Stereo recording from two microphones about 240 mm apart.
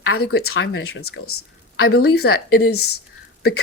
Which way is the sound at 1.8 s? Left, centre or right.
Left.